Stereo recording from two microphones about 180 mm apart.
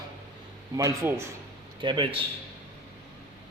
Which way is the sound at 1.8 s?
25° right (ahead or behind).